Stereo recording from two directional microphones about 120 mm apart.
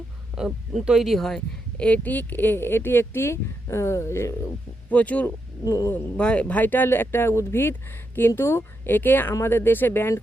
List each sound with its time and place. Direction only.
0.3 s speech: 5° right (ahead or behind); by 4.5 s 25° left (ahead or behind)
4.9 s speech: 10° left (ahead or behind)
5.6 s speech: 25° left (ahead or behind)
5.9 s speech: 10° left (ahead or behind)